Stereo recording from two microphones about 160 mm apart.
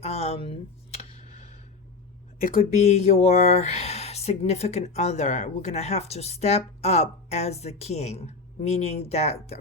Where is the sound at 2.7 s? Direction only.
45° left (ahead or behind).